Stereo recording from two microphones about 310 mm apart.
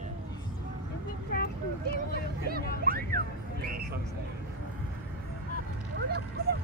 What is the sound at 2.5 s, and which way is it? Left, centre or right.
Hubbub, right.